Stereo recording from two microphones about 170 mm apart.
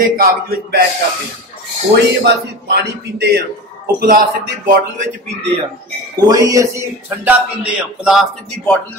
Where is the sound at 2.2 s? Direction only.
75° right (ahead or behind).